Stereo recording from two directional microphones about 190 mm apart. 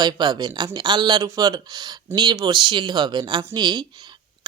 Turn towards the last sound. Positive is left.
turn(degrees=-25)  # may be behind; listen again after turning